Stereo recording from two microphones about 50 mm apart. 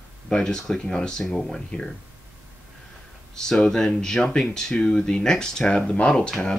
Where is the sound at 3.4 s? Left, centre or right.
Centre.